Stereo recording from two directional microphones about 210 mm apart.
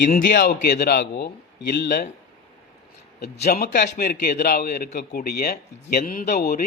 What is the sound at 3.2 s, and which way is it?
A man's voice, 50° left (ahead or behind).